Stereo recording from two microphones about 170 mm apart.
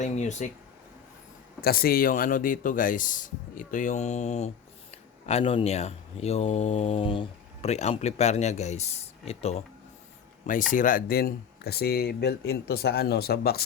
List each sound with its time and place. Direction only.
0.0 s speech: 45° left (ahead or behind)
1.6 s speech: 60° left (ahead or behind); by 9.6 s 35° left (ahead or behind)
10.4 s speech: 50° left (ahead or behind); by 13.6 s 65° left (ahead or behind)